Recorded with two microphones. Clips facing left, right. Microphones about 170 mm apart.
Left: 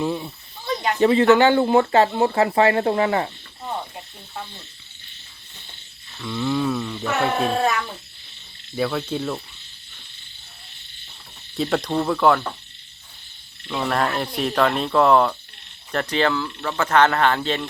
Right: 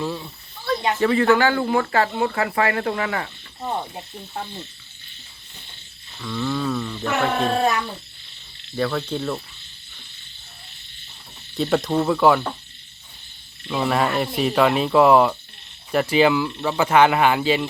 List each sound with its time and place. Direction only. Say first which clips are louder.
0.0 s snake: left 3 dB; 20° left (ahead or behind)
0.9 s speech: left 4 dB; 25° left (ahead or behind)
6.2 s speech: left 2 dB; 10° left (ahead or behind)
8.7 s speech: even; 5° left (ahead or behind)
11.5 s speech: right 2 dB; centre (ahead or behind)
13.7 s speech: right 2 dB; 5° right (ahead or behind)